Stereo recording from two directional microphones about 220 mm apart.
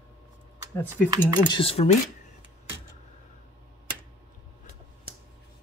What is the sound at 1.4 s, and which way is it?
Speech, 25° left (ahead or behind).